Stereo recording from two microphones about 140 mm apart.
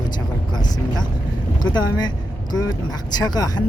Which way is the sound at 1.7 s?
30° left (ahead or behind).